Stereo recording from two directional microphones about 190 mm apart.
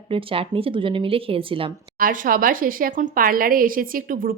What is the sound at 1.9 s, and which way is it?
A woman's voice, 45° right (ahead or behind).